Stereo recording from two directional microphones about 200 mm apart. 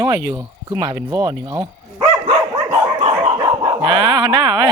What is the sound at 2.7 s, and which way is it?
Dog, 30° right (ahead or behind).